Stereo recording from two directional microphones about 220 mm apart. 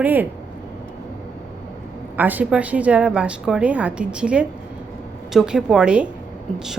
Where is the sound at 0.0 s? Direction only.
10° right (ahead or behind).